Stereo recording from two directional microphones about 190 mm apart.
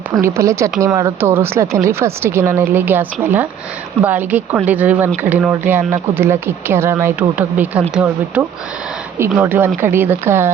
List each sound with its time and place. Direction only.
0.1 s speech: 15° right (ahead or behind)